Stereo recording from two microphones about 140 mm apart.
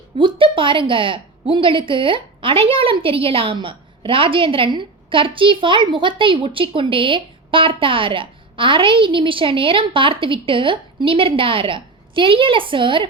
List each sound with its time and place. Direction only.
0.2 s a woman's voice: 35° right (ahead or behind)